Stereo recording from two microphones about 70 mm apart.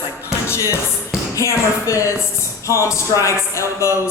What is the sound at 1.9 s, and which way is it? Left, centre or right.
Speech, left.